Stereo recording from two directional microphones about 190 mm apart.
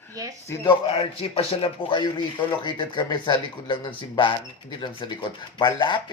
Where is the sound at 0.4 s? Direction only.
15° left (ahead or behind).